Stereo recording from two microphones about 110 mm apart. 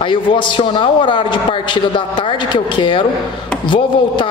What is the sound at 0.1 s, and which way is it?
A man's voice, 50° left (ahead or behind).